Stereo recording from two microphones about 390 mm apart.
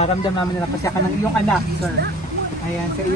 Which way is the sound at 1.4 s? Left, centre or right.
Centre.